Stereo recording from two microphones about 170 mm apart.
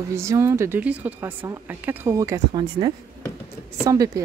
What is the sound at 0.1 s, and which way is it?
Speech, 15° right (ahead or behind).